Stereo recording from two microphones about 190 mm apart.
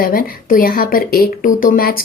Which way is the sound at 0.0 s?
50° left (ahead or behind).